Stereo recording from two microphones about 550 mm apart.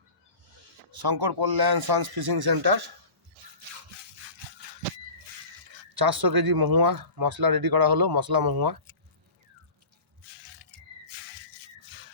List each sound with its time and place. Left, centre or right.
0.9 s speech: right
5.9 s speech: right